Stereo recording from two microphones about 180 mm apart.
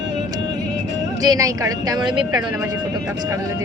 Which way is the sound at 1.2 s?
20° right (ahead or behind).